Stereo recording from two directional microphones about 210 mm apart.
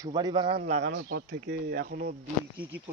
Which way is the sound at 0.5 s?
45° right (ahead or behind).